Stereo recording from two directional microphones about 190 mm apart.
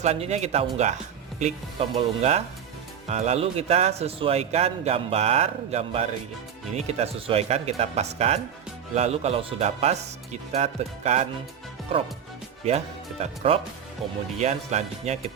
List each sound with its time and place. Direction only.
0.0 s a man's voice: 35° right (ahead or behind)
2.0 s a man's voice: 35° right (ahead or behind)